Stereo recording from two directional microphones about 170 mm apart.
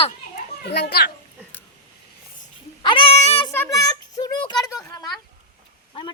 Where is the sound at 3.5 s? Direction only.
15° left (ahead or behind).